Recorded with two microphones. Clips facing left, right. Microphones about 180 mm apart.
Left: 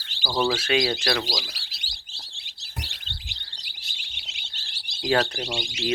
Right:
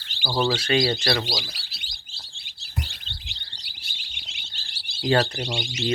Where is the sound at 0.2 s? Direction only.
10° right (ahead or behind).